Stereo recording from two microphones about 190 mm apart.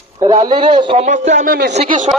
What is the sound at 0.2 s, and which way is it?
A man's voice, 25° right (ahead or behind).